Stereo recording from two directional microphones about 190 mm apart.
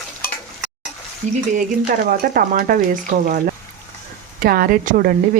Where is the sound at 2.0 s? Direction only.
45° right (ahead or behind).